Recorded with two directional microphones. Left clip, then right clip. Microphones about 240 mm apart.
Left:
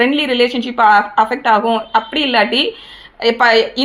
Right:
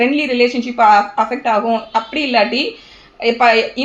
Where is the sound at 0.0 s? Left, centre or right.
Left.